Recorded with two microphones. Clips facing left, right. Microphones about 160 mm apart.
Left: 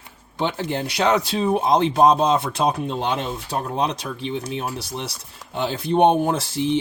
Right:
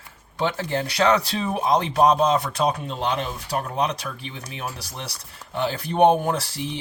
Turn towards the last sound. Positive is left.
turn(degrees=25)  # may be behind; listen again after turning